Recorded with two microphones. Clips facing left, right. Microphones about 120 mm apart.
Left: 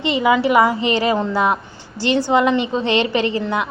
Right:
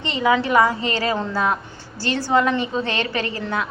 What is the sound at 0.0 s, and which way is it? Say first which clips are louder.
A woman's voice: left 3 dB; 10° left (ahead or behind).